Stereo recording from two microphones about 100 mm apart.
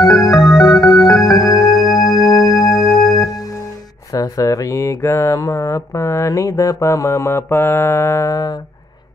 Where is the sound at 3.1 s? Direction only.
40° left (ahead or behind).